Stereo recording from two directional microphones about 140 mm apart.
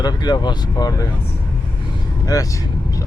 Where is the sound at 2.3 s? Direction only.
25° left (ahead or behind).